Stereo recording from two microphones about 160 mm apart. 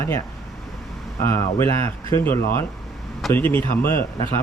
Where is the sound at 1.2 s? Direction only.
15° left (ahead or behind).